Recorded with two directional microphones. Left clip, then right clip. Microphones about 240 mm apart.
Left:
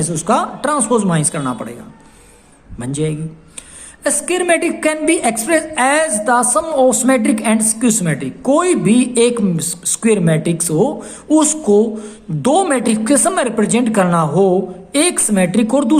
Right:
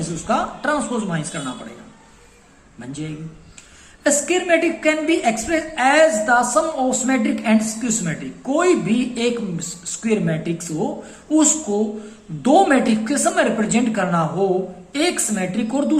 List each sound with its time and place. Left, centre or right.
0.3 s a woman's voice: left
2.8 s a woman's voice: left